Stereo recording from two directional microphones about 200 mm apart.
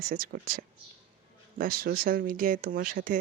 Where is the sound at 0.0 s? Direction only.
45° right (ahead or behind).